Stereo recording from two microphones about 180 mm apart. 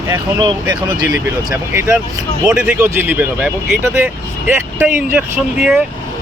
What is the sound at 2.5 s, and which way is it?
Speech, 10° right (ahead or behind).